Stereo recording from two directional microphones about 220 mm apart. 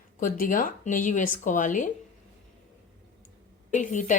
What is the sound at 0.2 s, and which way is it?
Speech, 40° left (ahead or behind).